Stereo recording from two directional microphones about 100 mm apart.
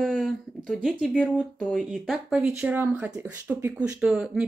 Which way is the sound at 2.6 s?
20° right (ahead or behind).